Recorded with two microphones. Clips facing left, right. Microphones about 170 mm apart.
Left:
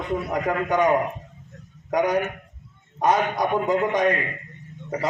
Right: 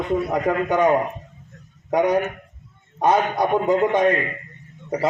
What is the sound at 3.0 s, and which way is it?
A man's voice, 30° right (ahead or behind).